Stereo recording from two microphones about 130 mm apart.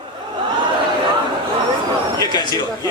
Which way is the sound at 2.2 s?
30° left (ahead or behind).